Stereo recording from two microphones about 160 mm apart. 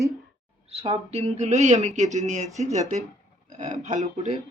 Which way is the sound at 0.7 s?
40° right (ahead or behind).